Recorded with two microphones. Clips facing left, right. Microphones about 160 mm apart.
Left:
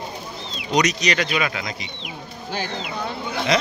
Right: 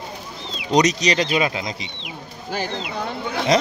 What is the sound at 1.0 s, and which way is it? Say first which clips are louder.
Speech: right 3 dB; 35° right (ahead or behind).